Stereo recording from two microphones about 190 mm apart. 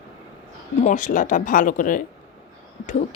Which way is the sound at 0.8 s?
40° left (ahead or behind).